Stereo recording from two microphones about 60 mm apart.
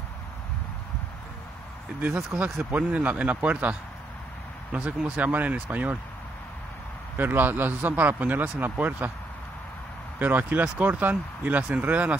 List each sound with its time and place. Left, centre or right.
2.0 s speech: right
4.7 s speech: centre
7.2 s speech: right
10.1 s speech: right